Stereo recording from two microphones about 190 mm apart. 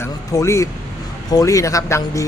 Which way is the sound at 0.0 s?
15° left (ahead or behind).